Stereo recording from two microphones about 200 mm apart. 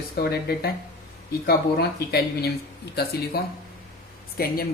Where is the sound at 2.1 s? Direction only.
50° left (ahead or behind).